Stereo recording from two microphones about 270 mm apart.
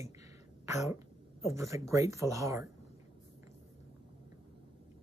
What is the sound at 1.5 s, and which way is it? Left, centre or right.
Speech, centre.